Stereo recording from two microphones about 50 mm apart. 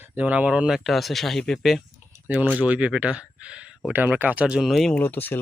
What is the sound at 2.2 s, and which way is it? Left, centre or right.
Speech, right.